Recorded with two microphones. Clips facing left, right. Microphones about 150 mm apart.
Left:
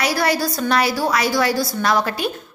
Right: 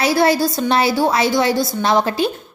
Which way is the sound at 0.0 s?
25° right (ahead or behind).